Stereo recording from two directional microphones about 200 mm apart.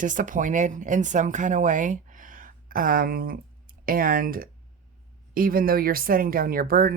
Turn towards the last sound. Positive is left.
turn(degrees=-45)  # may be behind; listen again after turning